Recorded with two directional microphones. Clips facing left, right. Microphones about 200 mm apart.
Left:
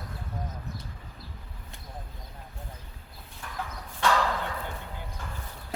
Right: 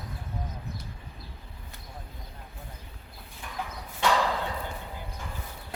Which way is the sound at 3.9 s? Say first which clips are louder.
Even; 15° right (ahead or behind).